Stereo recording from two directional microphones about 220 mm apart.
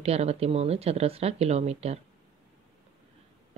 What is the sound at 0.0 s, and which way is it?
Speech, 30° right (ahead or behind).